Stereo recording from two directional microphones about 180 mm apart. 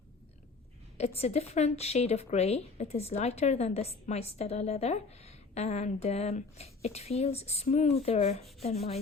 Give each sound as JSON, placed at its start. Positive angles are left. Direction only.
{"t": 0.9, "sound": "speech", "side_deg": 35}